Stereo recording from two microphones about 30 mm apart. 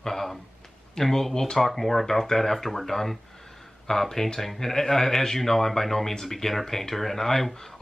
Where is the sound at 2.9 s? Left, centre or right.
Centre.